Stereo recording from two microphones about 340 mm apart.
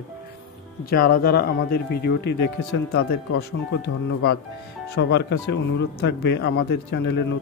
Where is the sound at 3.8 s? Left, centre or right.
Left.